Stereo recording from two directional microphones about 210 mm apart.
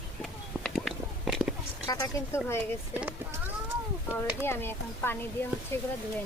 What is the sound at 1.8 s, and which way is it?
Speech, 15° left (ahead or behind).